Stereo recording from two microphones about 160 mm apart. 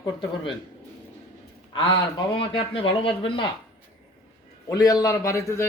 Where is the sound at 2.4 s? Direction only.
35° left (ahead or behind).